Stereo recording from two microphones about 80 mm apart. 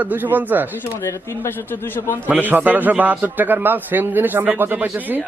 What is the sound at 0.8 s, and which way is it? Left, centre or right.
A man's voice, left.